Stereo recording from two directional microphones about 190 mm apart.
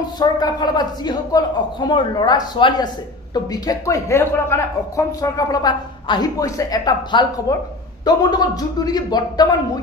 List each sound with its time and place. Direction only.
0.2 s speech: 20° left (ahead or behind)